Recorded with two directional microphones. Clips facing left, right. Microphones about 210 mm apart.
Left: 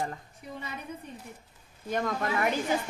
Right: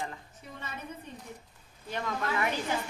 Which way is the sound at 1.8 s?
45° left (ahead or behind).